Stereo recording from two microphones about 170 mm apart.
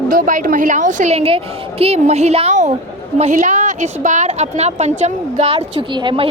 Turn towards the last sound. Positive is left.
turn(degrees=-30)  # may be behind; listen again after turning